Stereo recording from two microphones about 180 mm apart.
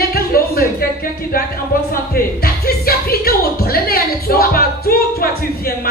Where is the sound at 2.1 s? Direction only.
55° left (ahead or behind).